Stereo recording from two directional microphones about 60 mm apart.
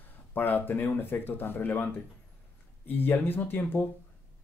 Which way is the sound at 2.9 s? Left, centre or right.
Left.